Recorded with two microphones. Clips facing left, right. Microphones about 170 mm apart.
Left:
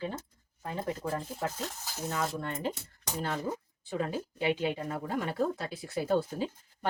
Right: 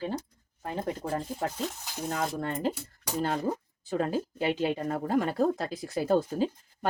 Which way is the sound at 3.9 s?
40° right (ahead or behind).